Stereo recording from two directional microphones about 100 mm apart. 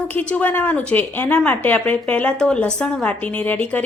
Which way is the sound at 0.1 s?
15° left (ahead or behind).